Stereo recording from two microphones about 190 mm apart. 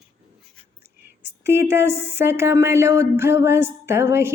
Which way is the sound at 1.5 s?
10° right (ahead or behind).